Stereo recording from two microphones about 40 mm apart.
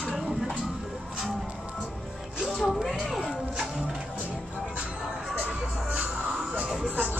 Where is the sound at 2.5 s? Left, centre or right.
Centre.